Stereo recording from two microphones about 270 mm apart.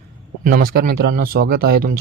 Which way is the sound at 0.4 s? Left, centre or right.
Right.